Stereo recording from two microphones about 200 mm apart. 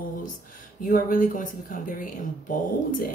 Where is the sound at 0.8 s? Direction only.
45° left (ahead or behind).